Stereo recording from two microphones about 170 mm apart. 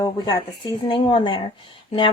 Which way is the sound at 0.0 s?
25° left (ahead or behind).